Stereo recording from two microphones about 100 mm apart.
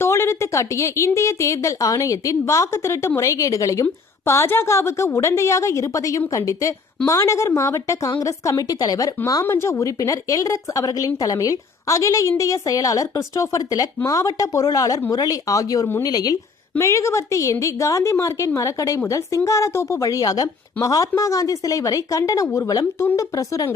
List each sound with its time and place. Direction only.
0.0 s a woman's voice: 25° left (ahead or behind)
9.4 s speech: 25° left (ahead or behind); by 16.4 s 40° left (ahead or behind)
16.7 s speech: 30° left (ahead or behind)